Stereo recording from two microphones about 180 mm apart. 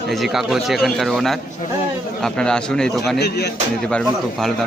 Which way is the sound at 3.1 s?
65° left (ahead or behind).